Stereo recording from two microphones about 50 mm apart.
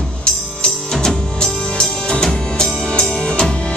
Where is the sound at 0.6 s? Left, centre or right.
Centre.